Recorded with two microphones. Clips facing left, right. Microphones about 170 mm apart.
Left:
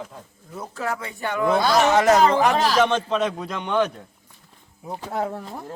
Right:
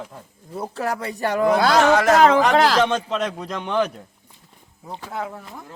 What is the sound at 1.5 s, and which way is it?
Speech, 70° right (ahead or behind).